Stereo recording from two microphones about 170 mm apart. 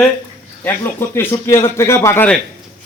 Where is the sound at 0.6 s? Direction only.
15° left (ahead or behind).